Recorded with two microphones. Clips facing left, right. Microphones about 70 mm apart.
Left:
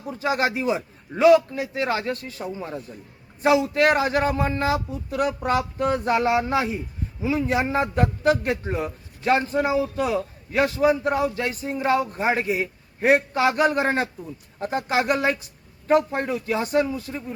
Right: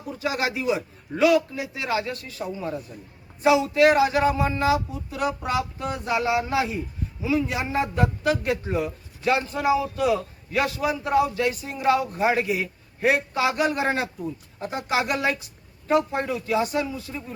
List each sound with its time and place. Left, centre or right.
0.2 s a man's voice: left
1.5 s a man's voice: left